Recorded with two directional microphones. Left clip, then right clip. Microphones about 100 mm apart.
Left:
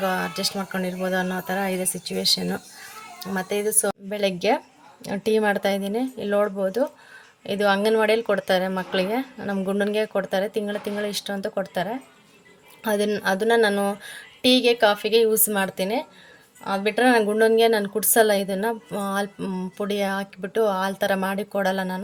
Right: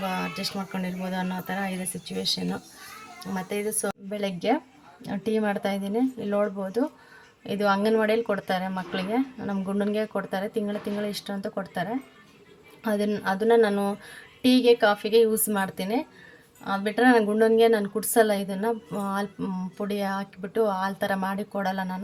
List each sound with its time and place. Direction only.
0.0 s speech: 20° left (ahead or behind)
3.2 s a woman's voice: 20° left (ahead or behind)
19.7 s a woman's voice: 25° left (ahead or behind)